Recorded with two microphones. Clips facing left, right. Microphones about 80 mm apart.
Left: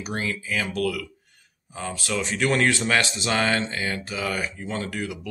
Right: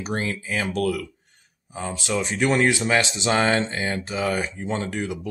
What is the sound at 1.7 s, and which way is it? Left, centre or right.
Speech, right.